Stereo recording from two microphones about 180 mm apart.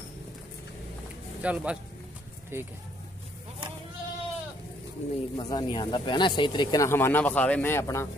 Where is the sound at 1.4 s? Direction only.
5° right (ahead or behind).